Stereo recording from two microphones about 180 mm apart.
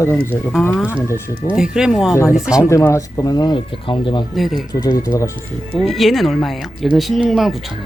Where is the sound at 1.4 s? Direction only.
5° right (ahead or behind).